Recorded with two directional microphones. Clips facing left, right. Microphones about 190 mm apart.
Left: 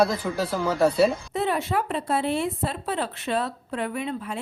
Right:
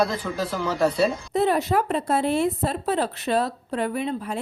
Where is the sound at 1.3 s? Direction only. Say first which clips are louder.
Right 4 dB; 40° right (ahead or behind).